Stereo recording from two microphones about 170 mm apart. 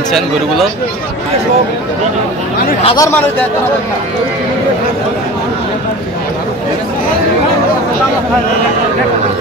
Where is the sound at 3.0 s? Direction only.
15° left (ahead or behind).